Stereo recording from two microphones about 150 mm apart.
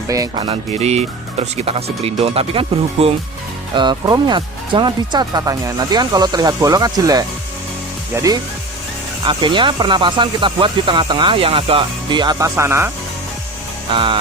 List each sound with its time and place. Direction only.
0.1 s speech: 25° right (ahead or behind)
0.4 s speech: 40° right (ahead or behind)
3.8 s speech: 30° right (ahead or behind)
13.9 s speech: 35° right (ahead or behind)